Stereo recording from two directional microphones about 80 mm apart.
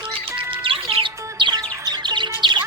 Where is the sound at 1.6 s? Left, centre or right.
Right.